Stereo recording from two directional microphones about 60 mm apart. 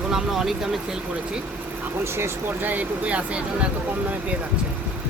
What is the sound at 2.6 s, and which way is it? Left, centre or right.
Speech, right.